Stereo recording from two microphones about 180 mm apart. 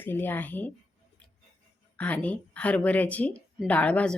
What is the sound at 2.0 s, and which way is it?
A woman's voice, 10° left (ahead or behind).